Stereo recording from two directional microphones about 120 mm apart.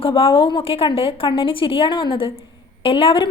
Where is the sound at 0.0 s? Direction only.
50° left (ahead or behind).